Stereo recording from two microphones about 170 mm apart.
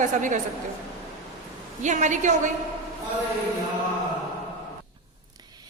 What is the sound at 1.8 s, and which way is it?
Speech, 45° right (ahead or behind).